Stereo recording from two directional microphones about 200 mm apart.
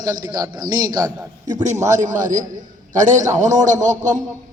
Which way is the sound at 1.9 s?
40° right (ahead or behind).